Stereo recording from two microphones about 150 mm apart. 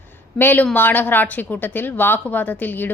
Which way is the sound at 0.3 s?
10° left (ahead or behind).